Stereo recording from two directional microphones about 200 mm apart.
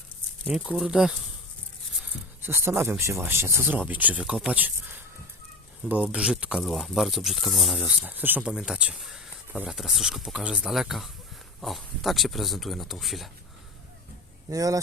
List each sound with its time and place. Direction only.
0.4 s speech: 5° right (ahead or behind)
2.4 s speech: 10° right (ahead or behind)
14.5 s speech: 15° right (ahead or behind)